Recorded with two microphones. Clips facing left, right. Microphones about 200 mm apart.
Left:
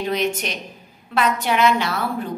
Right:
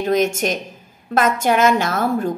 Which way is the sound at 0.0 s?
45° right (ahead or behind).